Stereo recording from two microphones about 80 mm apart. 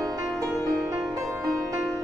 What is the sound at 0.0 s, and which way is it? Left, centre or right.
Music, right.